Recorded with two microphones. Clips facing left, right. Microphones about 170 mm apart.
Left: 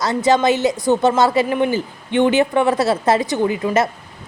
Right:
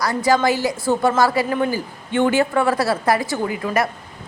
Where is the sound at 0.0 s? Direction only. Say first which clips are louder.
Left 2 dB; 20° left (ahead or behind).